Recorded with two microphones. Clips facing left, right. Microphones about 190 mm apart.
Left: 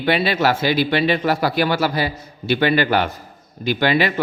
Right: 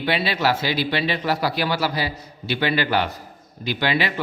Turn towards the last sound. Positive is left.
turn(degrees=50)  # may be behind; listen again after turning